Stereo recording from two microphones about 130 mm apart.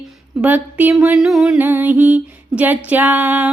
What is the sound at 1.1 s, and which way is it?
Music, centre (ahead or behind).